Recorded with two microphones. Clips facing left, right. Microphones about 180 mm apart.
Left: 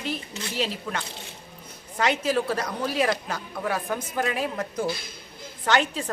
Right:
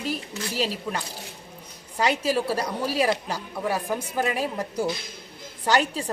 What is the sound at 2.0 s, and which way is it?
Speech, 35° right (ahead or behind).